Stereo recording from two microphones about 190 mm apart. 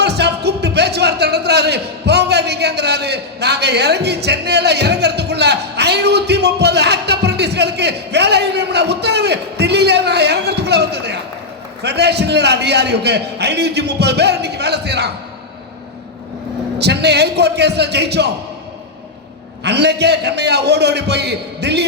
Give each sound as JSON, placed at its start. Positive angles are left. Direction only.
{"t": 0.0, "sound": "music", "side_deg": -60}
{"t": 11.8, "sound": "a man's voice", "side_deg": -60}
{"t": 16.7, "sound": "a man's voice", "side_deg": -60}
{"t": 19.6, "sound": "a man's voice", "side_deg": -60}